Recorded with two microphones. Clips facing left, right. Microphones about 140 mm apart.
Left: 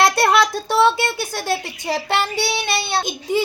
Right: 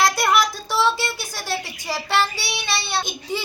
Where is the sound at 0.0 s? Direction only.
65° left (ahead or behind).